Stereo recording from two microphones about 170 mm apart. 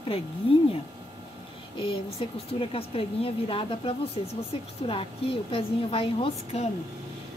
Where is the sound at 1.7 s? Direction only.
30° left (ahead or behind).